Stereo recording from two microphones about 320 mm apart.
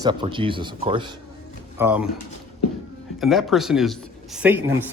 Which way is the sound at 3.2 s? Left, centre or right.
Centre.